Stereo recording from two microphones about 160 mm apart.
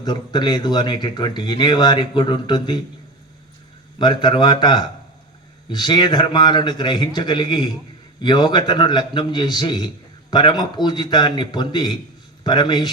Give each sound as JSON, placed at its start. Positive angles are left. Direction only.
{"t": 0.0, "sound": "a man's voice", "side_deg": 25}
{"t": 3.9, "sound": "a man's voice", "side_deg": 30}